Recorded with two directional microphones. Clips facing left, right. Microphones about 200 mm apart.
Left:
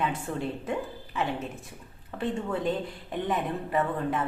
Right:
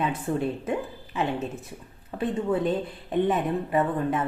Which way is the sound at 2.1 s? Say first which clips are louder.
Right 4 dB; 20° right (ahead or behind).